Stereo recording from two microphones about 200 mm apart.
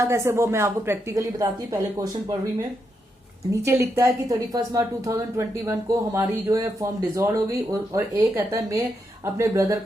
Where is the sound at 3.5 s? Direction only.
15° right (ahead or behind).